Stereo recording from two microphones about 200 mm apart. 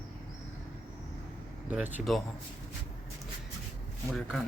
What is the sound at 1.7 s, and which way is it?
Speech, 10° right (ahead or behind).